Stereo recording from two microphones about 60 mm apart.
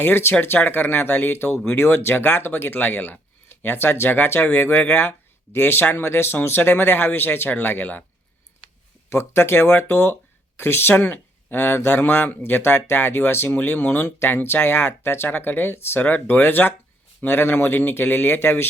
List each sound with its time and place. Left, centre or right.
0.0 s speech: left
9.0 s speech: left